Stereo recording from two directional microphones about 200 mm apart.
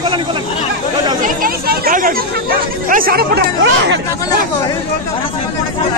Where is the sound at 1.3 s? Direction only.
45° right (ahead or behind).